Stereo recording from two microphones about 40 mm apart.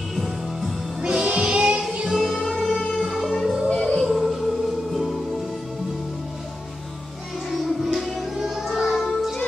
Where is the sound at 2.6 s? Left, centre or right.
Centre.